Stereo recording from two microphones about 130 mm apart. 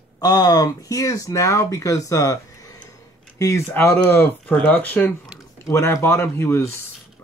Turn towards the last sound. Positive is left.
turn(degrees=20)  # may be behind; listen again after turning